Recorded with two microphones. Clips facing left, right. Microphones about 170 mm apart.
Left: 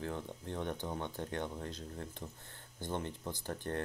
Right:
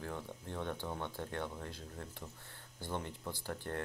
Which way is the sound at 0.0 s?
20° left (ahead or behind).